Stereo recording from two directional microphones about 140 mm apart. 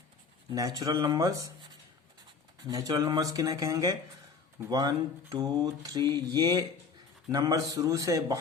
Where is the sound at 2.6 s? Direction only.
30° right (ahead or behind).